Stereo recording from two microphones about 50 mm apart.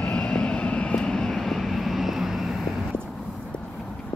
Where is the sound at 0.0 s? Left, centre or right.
Left; by 2.6 s centre.